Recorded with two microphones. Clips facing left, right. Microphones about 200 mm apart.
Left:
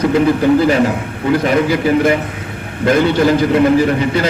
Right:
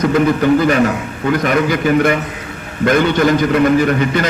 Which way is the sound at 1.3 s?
30° left (ahead or behind).